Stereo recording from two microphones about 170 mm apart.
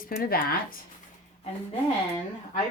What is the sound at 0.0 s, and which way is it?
Speech, 60° left (ahead or behind).